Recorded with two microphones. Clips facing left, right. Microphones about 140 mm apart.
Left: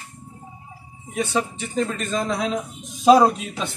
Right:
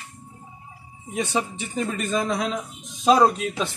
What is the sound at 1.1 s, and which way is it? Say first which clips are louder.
A man's voice: left 2 dB; 15° right (ahead or behind).